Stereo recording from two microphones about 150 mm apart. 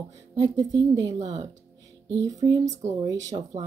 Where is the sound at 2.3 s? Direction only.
25° right (ahead or behind).